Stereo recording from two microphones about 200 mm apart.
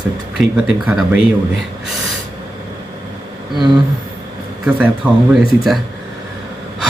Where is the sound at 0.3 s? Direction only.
5° right (ahead or behind).